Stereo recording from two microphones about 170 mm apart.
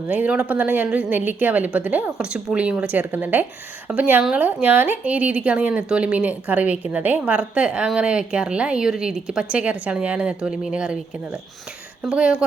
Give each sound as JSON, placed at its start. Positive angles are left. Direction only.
{"t": 0.1, "sound": "speech", "side_deg": -5}